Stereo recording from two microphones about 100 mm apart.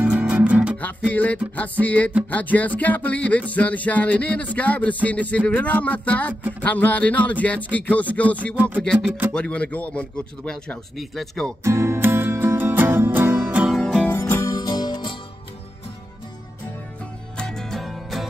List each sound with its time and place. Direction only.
0.0 s music: 15° right (ahead or behind)
0.7 s music: 15° left (ahead or behind)
8.5 s music: 15° right (ahead or behind)
9.3 s music: 10° left (ahead or behind)
11.0 s speech: centre (ahead or behind)
11.6 s music: 25° right (ahead or behind)
13.7 s music: 5° left (ahead or behind)
14.1 s music: 25° left (ahead or behind)
14.5 s music: 40° left (ahead or behind)
17.4 s music: 5° left (ahead or behind)